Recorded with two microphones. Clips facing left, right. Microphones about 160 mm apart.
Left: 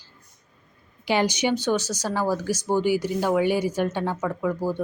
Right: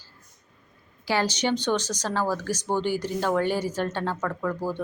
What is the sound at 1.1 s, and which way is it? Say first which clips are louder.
Speech: left 2 dB; 15° left (ahead or behind).